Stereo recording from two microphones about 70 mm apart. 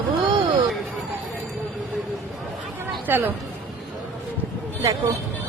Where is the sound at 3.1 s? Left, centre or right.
Right.